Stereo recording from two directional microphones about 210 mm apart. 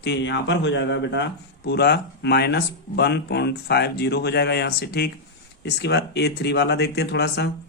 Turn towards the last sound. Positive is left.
turn(degrees=55)  # may be behind; listen again after turning